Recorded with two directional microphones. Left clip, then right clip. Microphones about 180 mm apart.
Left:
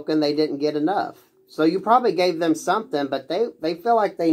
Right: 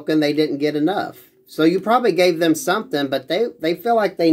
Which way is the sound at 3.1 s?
50° right (ahead or behind).